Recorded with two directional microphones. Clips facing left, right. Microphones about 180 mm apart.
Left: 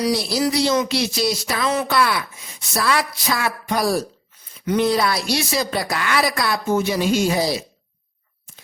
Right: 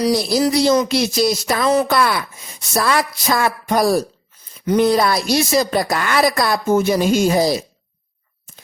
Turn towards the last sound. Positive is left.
turn(degrees=-45)  # may be behind; listen again after turning